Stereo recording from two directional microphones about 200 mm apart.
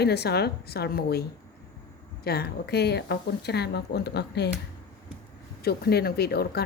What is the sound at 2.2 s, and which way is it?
Speech, 50° left (ahead or behind).